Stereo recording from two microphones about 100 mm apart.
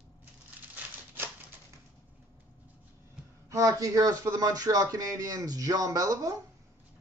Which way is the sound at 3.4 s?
30° right (ahead or behind).